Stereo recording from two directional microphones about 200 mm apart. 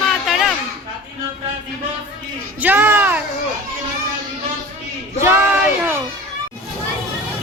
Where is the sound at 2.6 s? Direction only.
10° right (ahead or behind).